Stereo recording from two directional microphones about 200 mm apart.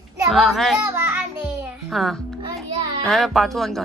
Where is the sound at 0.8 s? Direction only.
10° right (ahead or behind).